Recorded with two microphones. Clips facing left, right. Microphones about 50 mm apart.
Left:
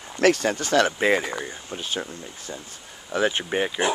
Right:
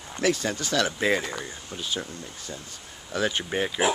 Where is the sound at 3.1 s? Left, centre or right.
Left.